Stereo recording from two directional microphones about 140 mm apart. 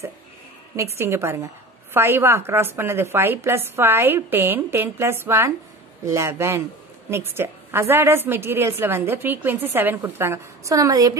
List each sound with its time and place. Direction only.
0.9 s a woman's voice: 20° right (ahead or behind)